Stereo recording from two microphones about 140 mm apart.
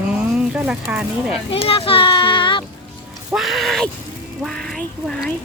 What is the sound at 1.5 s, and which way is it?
A child's voice, 45° left (ahead or behind).